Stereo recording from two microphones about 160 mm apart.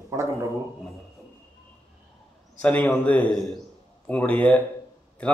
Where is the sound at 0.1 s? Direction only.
20° right (ahead or behind).